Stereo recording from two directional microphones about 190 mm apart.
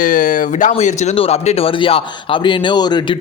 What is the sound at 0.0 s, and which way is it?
A man's voice, 45° left (ahead or behind).